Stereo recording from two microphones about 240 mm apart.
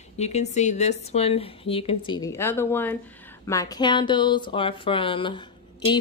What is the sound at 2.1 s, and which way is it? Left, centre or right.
A woman's voice, centre.